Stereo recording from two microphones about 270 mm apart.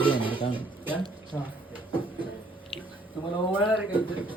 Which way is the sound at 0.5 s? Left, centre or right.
Centre.